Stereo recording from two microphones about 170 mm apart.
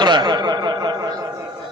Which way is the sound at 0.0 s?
25° right (ahead or behind).